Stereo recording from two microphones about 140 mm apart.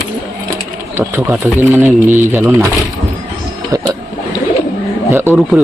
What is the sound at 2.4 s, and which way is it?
Speech, 20° right (ahead or behind).